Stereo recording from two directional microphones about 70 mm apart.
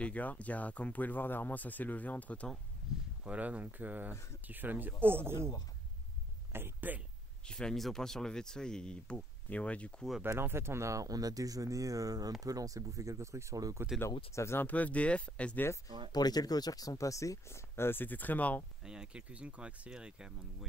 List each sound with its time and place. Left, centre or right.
0.0 s speech: left
3.3 s speech: right
6.5 s speech: right
7.4 s speech: centre
10.4 s speech: right
14.0 s speech: left
14.7 s speech: left
16.1 s speech: left
18.9 s speech: centre